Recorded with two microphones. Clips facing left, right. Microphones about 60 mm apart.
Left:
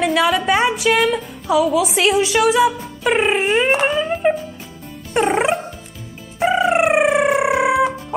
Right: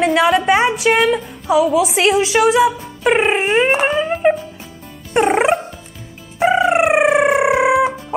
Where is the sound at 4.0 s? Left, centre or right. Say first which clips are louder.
Right 2 dB; centre.